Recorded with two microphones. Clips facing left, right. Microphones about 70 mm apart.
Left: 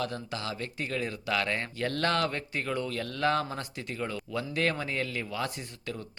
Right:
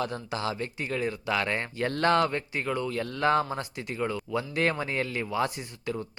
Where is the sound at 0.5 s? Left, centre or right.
Centre.